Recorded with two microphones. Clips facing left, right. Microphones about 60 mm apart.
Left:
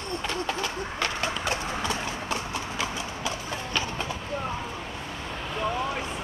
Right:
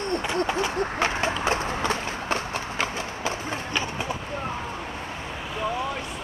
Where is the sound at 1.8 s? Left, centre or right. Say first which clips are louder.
Right 3 dB; right.